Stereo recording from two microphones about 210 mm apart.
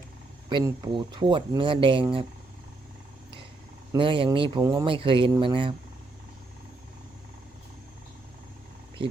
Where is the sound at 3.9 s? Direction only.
25° right (ahead or behind).